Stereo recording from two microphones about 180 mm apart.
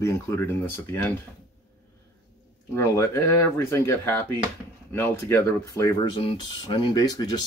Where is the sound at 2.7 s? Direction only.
15° left (ahead or behind).